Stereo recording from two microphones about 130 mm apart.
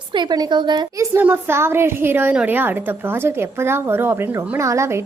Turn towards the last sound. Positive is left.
turn(degrees=-20)  # may be behind; listen again after turning